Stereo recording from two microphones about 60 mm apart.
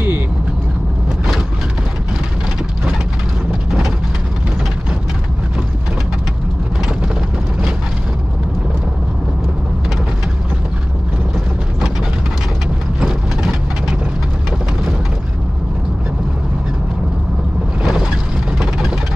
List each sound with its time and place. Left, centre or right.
13.0 s vehicle: centre
17.8 s a sound: centre
18.6 s vehicle: centre